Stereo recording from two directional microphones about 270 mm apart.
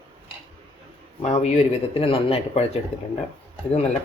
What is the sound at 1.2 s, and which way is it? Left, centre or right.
Speech, left.